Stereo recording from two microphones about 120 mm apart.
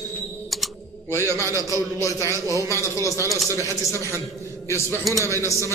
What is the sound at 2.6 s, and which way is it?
Speech, 25° left (ahead or behind).